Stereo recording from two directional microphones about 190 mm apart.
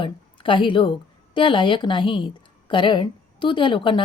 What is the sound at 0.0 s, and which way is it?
A woman's voice, 25° left (ahead or behind).